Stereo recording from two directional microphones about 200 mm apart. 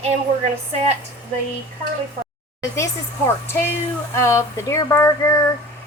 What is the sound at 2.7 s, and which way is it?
A woman's voice, 15° left (ahead or behind).